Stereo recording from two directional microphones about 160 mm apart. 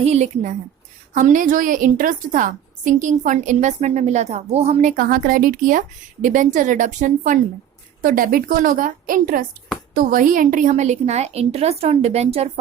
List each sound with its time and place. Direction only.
0.0 s a woman's voice: 45° right (ahead or behind)
1.1 s a woman's voice: 55° right (ahead or behind)